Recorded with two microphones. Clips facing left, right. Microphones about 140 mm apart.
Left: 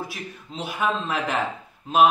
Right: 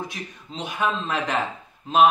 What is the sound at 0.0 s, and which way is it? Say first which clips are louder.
A man's voice: even; 5° left (ahead or behind).